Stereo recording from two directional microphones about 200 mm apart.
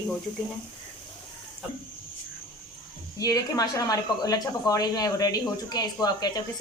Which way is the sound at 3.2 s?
15° left (ahead or behind).